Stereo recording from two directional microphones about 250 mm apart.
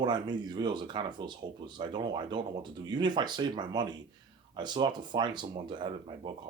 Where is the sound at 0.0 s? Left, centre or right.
Centre.